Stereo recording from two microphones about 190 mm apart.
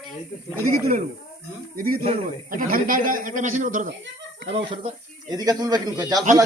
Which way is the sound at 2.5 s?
45° right (ahead or behind).